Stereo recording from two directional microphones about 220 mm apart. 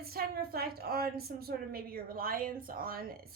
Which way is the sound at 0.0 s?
45° right (ahead or behind).